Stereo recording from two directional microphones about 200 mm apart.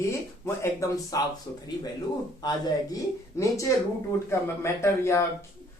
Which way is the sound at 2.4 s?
20° left (ahead or behind).